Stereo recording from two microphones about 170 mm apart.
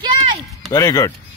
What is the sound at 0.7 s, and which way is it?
Speech, 20° left (ahead or behind).